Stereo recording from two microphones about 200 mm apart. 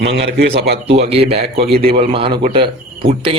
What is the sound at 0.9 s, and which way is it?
A man's voice, 30° right (ahead or behind).